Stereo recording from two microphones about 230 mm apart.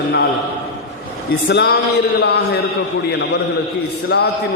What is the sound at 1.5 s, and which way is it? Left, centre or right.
Speech, left.